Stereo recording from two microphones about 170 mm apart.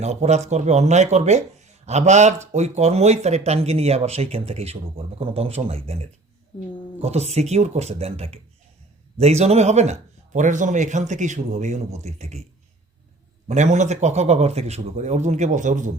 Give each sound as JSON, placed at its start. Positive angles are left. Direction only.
{"t": 0.0, "sound": "speech", "side_deg": -40}
{"t": 7.0, "sound": "speech", "side_deg": -40}
{"t": 13.5, "sound": "speech", "side_deg": -45}